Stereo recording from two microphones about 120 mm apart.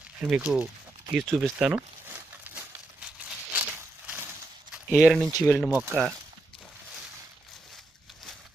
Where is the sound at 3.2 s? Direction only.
10° right (ahead or behind).